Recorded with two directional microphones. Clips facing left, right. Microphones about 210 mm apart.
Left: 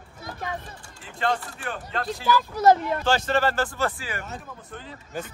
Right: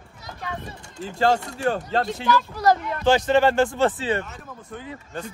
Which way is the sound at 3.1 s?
15° right (ahead or behind).